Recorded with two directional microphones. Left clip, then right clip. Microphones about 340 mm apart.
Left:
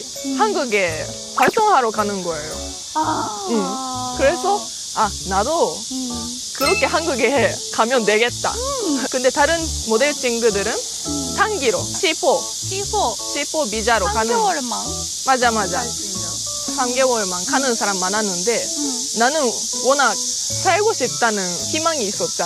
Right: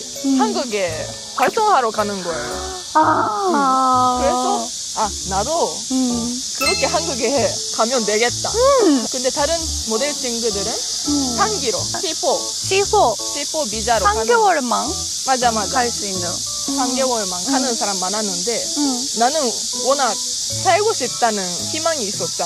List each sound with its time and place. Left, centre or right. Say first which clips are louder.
0.4 s speech: left 4 dB; left
2.9 s music: right 6 dB; right
3.7 s speech: right 11 dB; right
4.9 s speech: left 2 dB; left
8.6 s speech: right 10 dB; right
9.2 s speech: left 3 dB; left
11.6 s speech: left 3 dB; left
12.7 s speech: right 6 dB; right
13.6 s speech: left 1 dB; left
14.3 s speech: right 4 dB; right
15.2 s speech: left 1 dB; left
16.7 s speech: left 2 dB; left